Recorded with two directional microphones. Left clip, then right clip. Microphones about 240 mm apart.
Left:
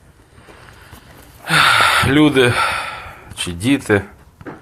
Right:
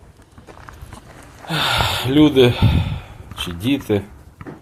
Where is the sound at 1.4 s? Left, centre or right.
Centre.